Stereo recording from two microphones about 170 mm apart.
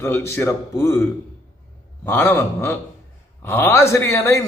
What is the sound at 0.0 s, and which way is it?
Speech, 15° left (ahead or behind).